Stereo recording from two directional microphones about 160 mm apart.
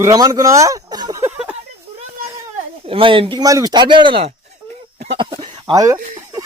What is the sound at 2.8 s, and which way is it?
Speech, 35° right (ahead or behind).